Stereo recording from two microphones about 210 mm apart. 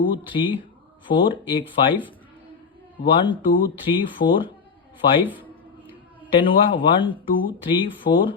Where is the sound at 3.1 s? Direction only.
25° left (ahead or behind).